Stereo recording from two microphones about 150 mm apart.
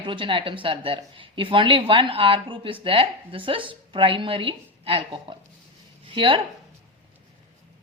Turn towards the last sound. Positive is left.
turn(degrees=-35)  # may be behind; listen again after turning